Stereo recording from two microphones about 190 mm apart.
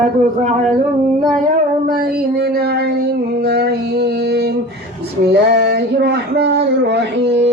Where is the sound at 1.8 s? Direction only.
50° right (ahead or behind).